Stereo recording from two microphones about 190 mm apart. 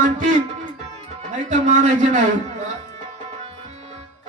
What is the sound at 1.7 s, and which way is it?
Music, 40° right (ahead or behind).